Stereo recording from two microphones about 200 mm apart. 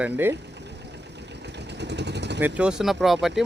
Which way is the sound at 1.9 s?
60° right (ahead or behind).